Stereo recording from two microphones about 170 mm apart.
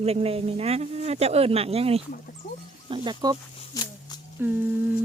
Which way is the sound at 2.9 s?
25° right (ahead or behind).